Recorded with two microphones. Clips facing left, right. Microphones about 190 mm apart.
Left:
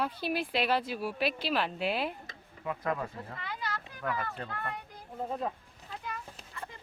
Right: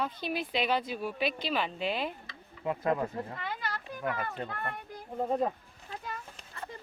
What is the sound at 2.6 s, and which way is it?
Speech, 25° right (ahead or behind).